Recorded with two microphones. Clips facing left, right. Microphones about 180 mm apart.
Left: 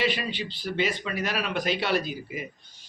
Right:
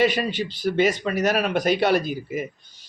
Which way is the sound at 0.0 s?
45° right (ahead or behind).